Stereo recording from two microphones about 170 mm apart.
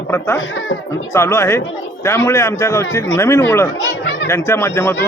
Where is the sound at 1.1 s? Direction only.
15° left (ahead or behind).